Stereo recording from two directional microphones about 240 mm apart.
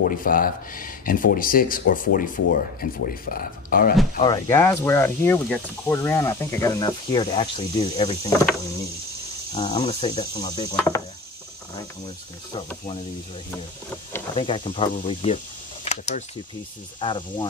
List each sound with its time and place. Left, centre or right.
0.0 s speech: left
4.2 s speech: centre
9.6 s speech: centre
14.4 s speech: left
15.3 s a sound: left
17.0 s speech: centre